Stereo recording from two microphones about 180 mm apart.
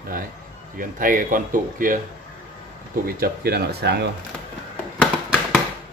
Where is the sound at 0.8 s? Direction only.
50° right (ahead or behind).